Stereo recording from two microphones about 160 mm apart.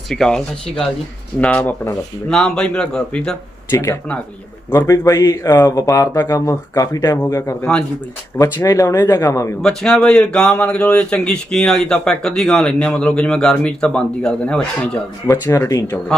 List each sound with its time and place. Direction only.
0.1 s speech: 5° left (ahead or behind)
2.3 s speech: 5° left (ahead or behind)
4.7 s speech: 20° left (ahead or behind)
9.6 s speech: 5° left (ahead or behind)
15.3 s speech: 20° left (ahead or behind)